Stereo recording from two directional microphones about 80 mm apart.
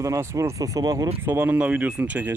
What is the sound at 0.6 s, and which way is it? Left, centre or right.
Speech, right.